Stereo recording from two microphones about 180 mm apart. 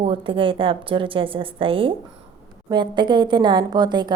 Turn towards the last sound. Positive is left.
turn(degrees=-25)  # may be behind; listen again after turning